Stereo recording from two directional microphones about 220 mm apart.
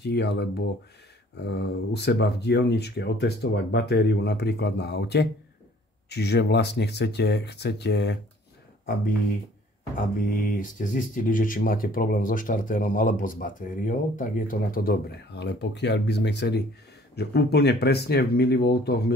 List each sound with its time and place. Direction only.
0.0 s speech: 50° left (ahead or behind)
9.9 s speech: 40° left (ahead or behind)